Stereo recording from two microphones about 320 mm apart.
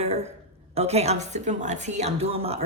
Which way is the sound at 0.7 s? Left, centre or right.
Centre.